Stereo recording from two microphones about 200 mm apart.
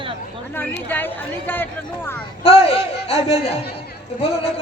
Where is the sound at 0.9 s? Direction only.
10° left (ahead or behind).